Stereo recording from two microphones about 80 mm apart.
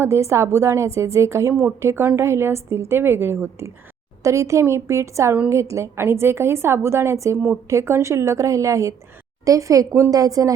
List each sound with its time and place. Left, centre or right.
0.0 s a woman's voice: right
4.2 s a woman's voice: right